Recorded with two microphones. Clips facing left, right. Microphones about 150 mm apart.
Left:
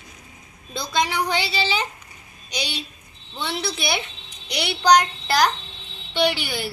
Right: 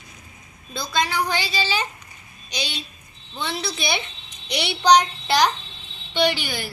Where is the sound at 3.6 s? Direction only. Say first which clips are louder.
Left 1 dB; 5° left (ahead or behind).